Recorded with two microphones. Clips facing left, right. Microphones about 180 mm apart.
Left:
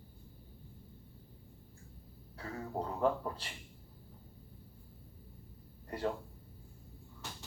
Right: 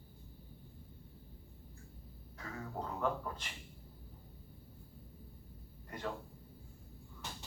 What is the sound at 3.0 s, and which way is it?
Speech, 35° left (ahead or behind).